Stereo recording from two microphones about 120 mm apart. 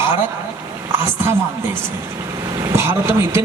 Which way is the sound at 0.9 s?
20° right (ahead or behind).